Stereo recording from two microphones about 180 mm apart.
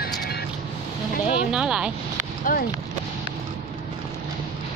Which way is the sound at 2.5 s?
50° left (ahead or behind).